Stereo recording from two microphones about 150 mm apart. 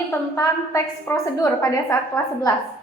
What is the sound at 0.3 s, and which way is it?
A woman's voice, 20° left (ahead or behind).